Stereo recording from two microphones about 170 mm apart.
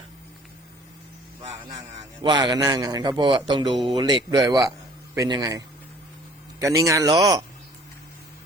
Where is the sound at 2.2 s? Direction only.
25° right (ahead or behind).